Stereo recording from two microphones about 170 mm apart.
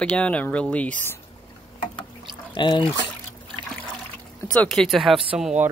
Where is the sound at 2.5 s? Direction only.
30° left (ahead or behind).